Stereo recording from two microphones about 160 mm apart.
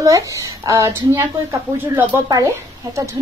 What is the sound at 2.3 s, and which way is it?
Speech, 20° right (ahead or behind).